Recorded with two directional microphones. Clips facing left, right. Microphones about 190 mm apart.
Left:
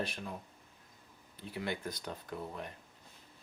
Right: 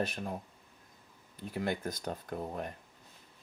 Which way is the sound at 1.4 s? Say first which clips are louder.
Right 4 dB; 45° right (ahead or behind).